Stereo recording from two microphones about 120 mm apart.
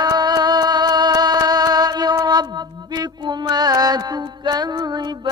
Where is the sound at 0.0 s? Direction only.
35° right (ahead or behind).